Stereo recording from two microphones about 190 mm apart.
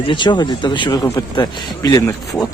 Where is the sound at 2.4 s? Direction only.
5° left (ahead or behind).